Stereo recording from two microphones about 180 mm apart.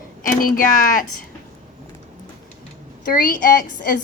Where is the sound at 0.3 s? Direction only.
50° left (ahead or behind).